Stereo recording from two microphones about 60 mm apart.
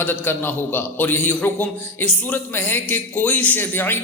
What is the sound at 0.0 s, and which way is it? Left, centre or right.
A man's voice, left.